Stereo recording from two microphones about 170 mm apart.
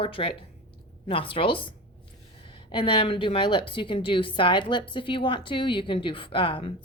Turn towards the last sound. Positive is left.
turn(degrees=30)  # may be behind; listen again after turning